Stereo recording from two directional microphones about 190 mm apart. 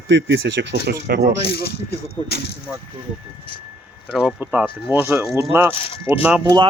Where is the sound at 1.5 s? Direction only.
55° left (ahead or behind).